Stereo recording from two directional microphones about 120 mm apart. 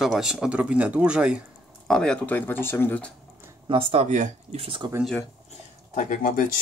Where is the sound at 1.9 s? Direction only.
5° left (ahead or behind).